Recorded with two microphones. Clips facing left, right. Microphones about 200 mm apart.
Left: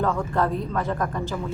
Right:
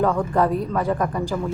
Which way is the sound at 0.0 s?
15° right (ahead or behind).